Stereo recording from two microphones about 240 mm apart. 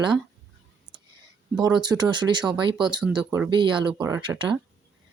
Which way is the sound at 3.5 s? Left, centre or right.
Centre.